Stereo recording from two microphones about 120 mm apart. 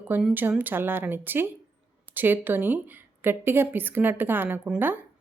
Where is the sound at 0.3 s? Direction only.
15° right (ahead or behind).